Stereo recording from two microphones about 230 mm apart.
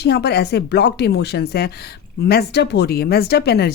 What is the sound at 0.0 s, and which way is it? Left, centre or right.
Speech, left.